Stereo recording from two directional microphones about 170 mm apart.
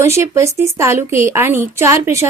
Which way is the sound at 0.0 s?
15° right (ahead or behind).